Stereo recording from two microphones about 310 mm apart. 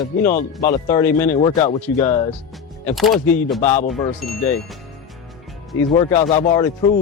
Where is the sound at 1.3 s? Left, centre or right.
Centre.